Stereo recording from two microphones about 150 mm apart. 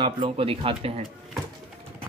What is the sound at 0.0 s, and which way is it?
Speech, 35° right (ahead or behind).